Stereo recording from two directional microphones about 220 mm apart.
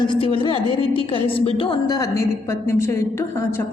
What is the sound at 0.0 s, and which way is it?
A woman's voice, 25° left (ahead or behind).